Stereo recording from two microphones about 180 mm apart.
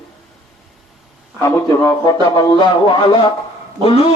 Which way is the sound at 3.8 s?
30° left (ahead or behind).